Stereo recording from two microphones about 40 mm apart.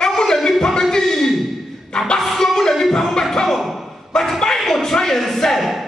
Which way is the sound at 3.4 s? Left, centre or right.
Centre.